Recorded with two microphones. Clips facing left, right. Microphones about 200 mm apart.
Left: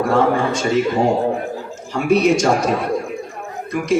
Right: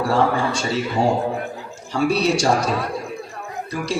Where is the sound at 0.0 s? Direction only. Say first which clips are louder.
Left 3 dB; 35° right (ahead or behind).